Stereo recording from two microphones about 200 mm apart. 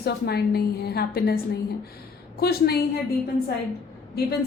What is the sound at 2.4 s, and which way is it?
Speech, 50° left (ahead or behind).